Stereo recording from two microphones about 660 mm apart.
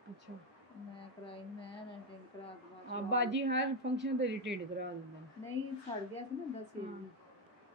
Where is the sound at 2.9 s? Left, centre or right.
Centre.